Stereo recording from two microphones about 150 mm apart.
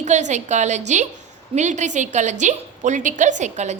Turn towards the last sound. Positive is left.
turn(degrees=-50)  # may be behind; listen again after turning